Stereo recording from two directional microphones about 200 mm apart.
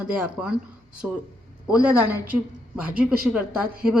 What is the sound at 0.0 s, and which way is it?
Speech, 5° right (ahead or behind).